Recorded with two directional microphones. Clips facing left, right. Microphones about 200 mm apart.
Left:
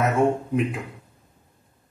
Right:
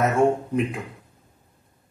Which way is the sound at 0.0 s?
Centre (ahead or behind).